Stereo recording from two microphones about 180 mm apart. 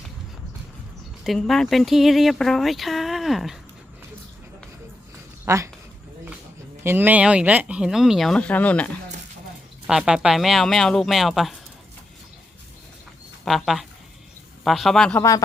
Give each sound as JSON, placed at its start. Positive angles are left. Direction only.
{"t": 1.2, "sound": "speech", "side_deg": 0}
{"t": 5.5, "sound": "speech", "side_deg": -15}
{"t": 6.8, "sound": "speech", "side_deg": -10}
{"t": 9.8, "sound": "speech", "side_deg": -5}
{"t": 13.4, "sound": "speech", "side_deg": 0}